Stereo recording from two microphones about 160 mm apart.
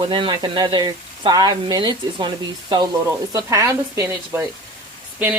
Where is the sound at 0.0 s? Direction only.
30° right (ahead or behind).